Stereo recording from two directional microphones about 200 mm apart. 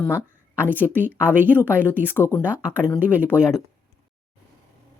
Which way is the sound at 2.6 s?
5° right (ahead or behind).